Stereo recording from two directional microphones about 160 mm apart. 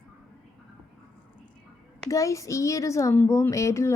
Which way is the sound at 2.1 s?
20° left (ahead or behind).